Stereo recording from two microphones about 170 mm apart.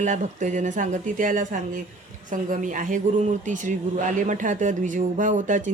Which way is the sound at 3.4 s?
50° right (ahead or behind).